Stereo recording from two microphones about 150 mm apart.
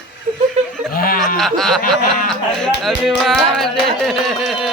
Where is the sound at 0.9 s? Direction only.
80° left.